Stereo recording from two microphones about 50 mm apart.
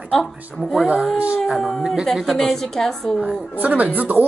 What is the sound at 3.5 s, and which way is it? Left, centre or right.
Speech, right.